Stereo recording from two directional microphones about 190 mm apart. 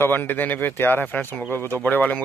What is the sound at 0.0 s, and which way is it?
Speech, 10° left (ahead or behind).